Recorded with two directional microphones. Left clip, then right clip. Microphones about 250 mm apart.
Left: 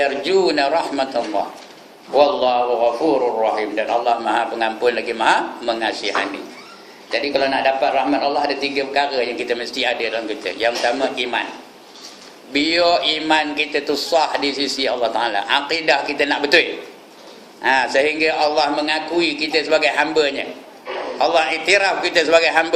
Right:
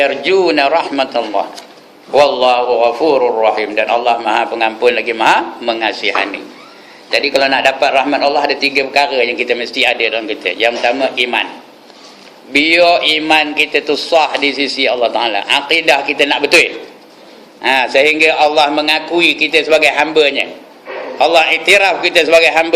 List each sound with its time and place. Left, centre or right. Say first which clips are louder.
0.0 s a man's voice: right 5 dB; right
12.5 s a man's voice: right 7 dB; centre
17.6 s a man's voice: right 5 dB; right